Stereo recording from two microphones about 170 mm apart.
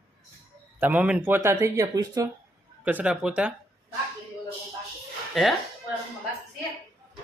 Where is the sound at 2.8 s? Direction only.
10° right (ahead or behind).